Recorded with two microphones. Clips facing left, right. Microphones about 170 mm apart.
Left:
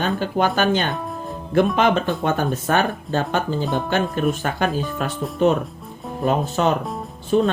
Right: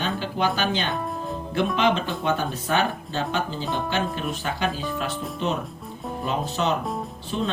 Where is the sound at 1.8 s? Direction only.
50° left (ahead or behind).